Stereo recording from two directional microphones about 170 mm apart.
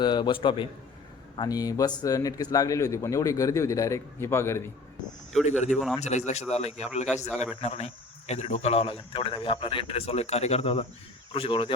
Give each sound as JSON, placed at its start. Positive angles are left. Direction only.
{"t": 0.0, "sound": "speech", "side_deg": 25}
{"t": 5.5, "sound": "a man's voice", "side_deg": 45}
{"t": 5.7, "sound": "a man's voice", "side_deg": 0}
{"t": 6.0, "sound": "a man's voice", "side_deg": 40}